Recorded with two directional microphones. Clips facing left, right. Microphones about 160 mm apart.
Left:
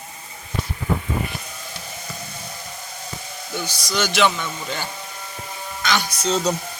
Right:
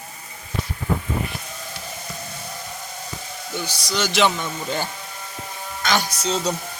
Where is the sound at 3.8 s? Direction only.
30° right (ahead or behind).